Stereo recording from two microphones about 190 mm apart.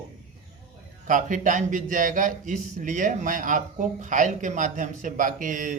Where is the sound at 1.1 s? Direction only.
45° right (ahead or behind).